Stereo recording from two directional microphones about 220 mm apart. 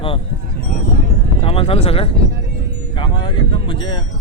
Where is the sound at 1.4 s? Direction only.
25° left (ahead or behind).